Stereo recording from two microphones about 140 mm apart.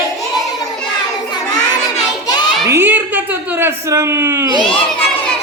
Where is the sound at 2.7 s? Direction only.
15° right (ahead or behind).